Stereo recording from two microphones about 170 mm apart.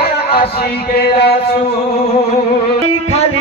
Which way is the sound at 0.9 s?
70° left (ahead or behind).